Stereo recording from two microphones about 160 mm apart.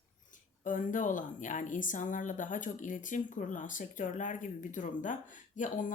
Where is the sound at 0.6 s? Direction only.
55° left (ahead or behind).